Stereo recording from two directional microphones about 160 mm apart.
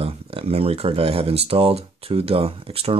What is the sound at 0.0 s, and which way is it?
Speech, 35° right (ahead or behind).